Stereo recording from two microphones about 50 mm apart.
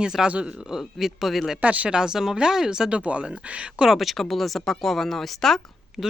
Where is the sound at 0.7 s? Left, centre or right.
Centre.